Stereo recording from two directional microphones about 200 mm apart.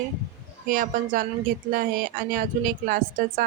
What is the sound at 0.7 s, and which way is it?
Speech, 45° right (ahead or behind).